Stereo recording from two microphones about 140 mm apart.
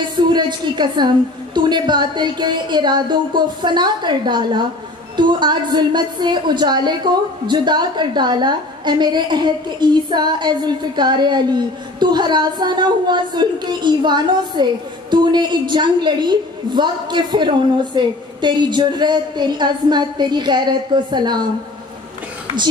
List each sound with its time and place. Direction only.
0.0 s a woman's voice: 30° right (ahead or behind)